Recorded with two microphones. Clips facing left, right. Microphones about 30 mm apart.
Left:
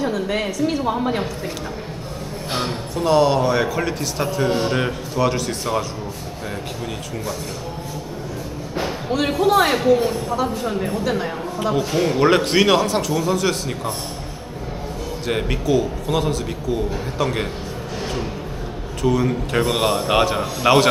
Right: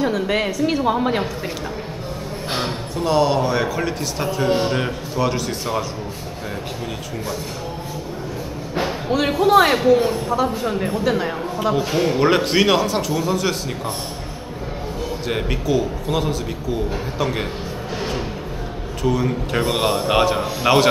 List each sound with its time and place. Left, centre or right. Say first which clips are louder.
0.0 s a woman's voice: right 2 dB; centre
2.5 s a man's voice: left 1 dB; centre
8.7 s a man's voice: right 2 dB; centre
15.2 s a man's voice: left 2 dB; centre
19.0 s a man's voice: left 1 dB; centre